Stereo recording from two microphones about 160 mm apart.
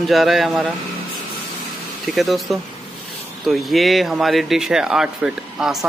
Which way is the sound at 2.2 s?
Centre (ahead or behind).